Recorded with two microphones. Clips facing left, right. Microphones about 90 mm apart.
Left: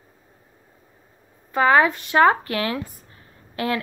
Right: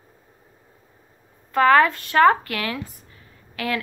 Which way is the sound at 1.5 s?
15° left (ahead or behind).